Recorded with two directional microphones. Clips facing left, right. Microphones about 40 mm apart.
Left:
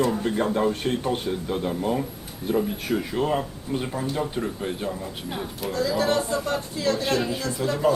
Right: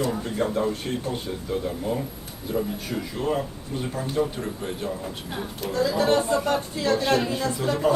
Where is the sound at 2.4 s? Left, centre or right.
Left.